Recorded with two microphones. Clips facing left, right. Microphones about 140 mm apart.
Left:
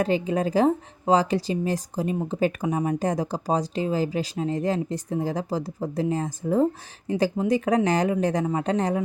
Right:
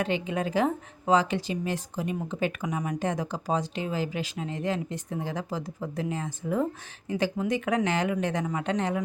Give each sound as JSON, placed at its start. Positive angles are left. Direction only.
{"t": 0.0, "sound": "speech", "side_deg": 35}